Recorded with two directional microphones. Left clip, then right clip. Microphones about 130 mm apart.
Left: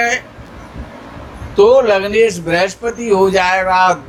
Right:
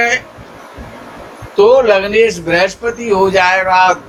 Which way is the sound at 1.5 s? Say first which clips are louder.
Right 1 dB; 55° left (ahead or behind).